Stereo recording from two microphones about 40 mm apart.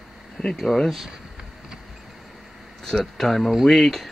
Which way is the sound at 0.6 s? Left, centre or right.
Centre.